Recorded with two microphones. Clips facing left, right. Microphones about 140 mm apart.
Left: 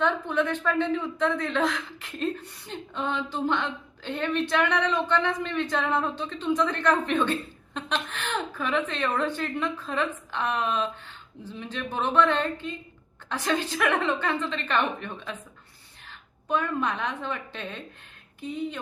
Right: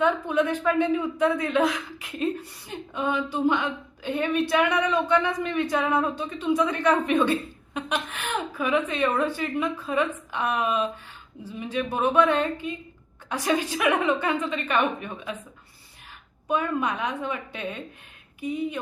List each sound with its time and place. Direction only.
0.0 s speech: 10° right (ahead or behind)
16.5 s speech: 10° right (ahead or behind)